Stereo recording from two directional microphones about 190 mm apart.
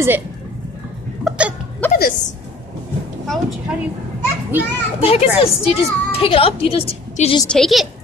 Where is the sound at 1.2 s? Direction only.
5° right (ahead or behind).